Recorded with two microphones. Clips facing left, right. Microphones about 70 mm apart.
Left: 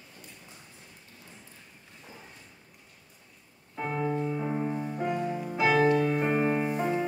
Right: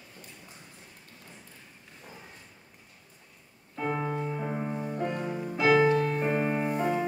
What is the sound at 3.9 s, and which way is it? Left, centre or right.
Music, centre.